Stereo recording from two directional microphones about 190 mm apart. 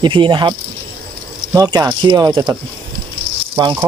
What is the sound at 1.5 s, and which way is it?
Speech, 20° right (ahead or behind).